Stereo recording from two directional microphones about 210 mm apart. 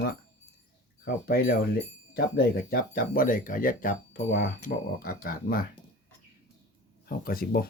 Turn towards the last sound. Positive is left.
turn(degrees=45)  # may be behind; listen again after turning